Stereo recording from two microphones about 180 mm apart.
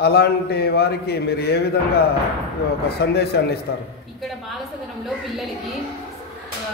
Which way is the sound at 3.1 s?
65° left (ahead or behind).